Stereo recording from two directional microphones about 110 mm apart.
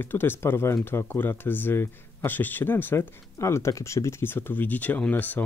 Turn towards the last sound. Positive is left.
turn(degrees=15)  # may be behind; listen again after turning